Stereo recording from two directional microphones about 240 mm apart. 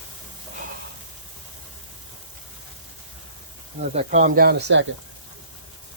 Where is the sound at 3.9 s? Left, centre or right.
Right.